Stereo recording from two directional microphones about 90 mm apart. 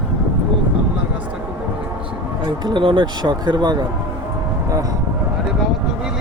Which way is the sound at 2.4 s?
65° right (ahead or behind).